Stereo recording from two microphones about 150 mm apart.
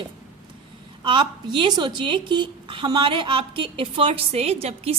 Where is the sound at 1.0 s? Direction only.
30° right (ahead or behind).